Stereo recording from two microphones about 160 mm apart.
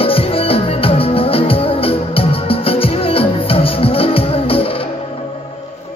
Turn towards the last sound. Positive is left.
turn(degrees=35)  # may be behind; listen again after turning